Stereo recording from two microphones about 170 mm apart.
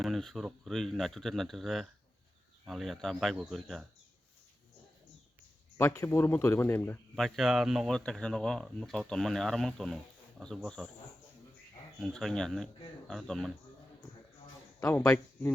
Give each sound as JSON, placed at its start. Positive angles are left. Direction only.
{"t": 0.0, "sound": "speech", "side_deg": 0}
{"t": 5.7, "sound": "a man's voice", "side_deg": 15}
{"t": 7.2, "sound": "speech", "side_deg": 0}
{"t": 11.9, "sound": "speech", "side_deg": 0}
{"t": 14.8, "sound": "a man's voice", "side_deg": 20}